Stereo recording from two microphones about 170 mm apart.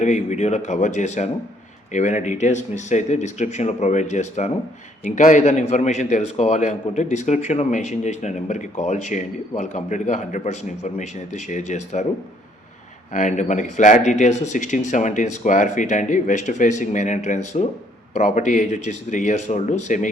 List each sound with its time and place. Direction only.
0.0 s a man's voice: 45° left (ahead or behind)
13.1 s a man's voice: 45° left (ahead or behind)